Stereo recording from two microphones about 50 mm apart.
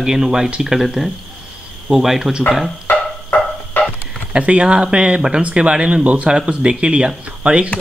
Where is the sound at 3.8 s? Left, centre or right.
Left.